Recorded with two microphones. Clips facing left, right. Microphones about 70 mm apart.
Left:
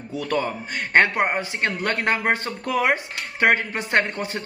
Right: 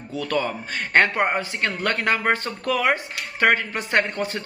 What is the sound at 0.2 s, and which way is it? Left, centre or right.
A man's voice, left.